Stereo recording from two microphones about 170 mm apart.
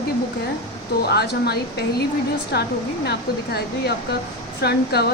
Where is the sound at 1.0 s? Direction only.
70° left (ahead or behind).